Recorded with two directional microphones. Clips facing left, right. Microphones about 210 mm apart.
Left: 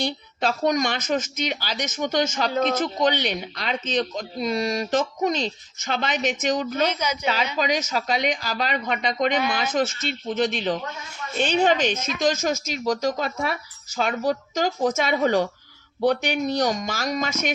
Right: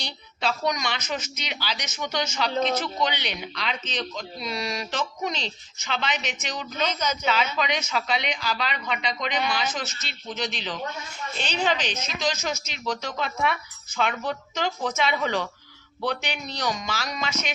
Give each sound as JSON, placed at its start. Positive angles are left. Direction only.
{"t": 0.0, "sound": "speech", "side_deg": 45}
{"t": 6.9, "sound": "a woman's voice", "side_deg": 10}
{"t": 7.6, "sound": "speech", "side_deg": 40}